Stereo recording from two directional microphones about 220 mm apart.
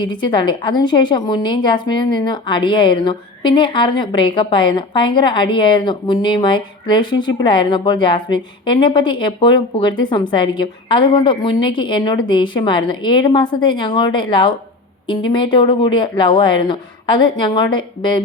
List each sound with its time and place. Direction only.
0.0 s a woman's voice: 20° left (ahead or behind)